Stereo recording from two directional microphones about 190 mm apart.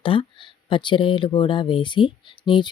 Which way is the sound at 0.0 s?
25° left (ahead or behind).